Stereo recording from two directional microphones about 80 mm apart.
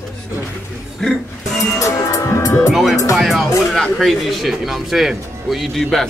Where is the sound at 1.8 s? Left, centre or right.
Left.